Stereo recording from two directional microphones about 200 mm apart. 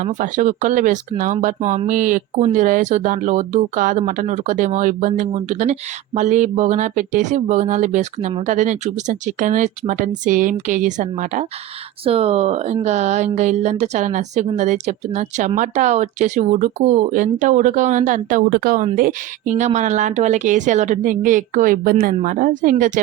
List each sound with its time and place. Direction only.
0.0 s a woman's voice: 40° right (ahead or behind)